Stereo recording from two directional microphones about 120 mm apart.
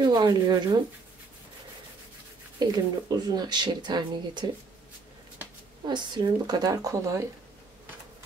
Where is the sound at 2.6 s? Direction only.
35° right (ahead or behind).